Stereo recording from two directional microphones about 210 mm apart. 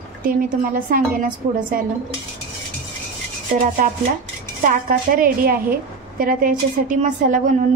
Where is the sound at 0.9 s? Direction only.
40° right (ahead or behind).